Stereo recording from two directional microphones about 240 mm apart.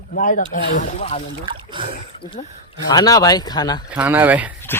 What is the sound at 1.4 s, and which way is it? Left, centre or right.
Speech, right.